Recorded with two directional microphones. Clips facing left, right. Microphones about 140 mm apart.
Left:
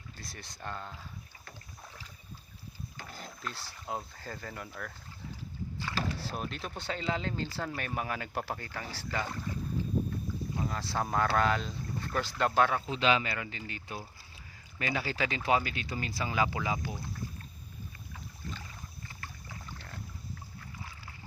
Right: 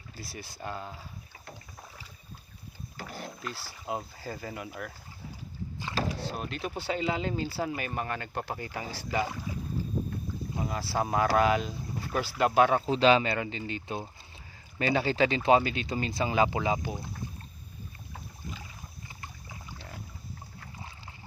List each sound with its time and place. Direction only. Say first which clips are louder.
0.2 s speech: right 5 dB; 5° right (ahead or behind)
3.4 s speech: right 3 dB; 5° right (ahead or behind)
6.2 s speech: right 3 dB; centre (ahead or behind)
8.5 s speech: right 4 dB; 15° right (ahead or behind)
12.7 s speech: right 6 dB; 35° right (ahead or behind)
19.0 s rowboat: right 1 dB; 15° right (ahead or behind)